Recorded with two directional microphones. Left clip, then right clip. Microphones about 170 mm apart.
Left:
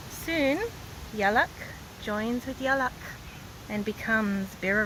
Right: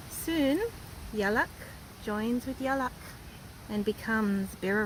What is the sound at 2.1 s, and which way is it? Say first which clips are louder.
Speech: left 2 dB; 30° right (ahead or behind).